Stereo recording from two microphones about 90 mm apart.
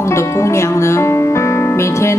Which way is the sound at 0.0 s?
30° left (ahead or behind).